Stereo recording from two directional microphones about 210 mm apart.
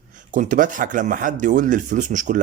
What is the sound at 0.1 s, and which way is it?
Speech, 35° right (ahead or behind).